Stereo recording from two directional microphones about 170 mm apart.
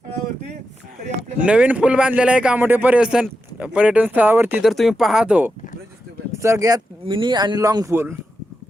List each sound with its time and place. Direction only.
1.4 s speech: 5° right (ahead or behind)
4.6 s speech: centre (ahead or behind)
6.3 s speech: 15° right (ahead or behind)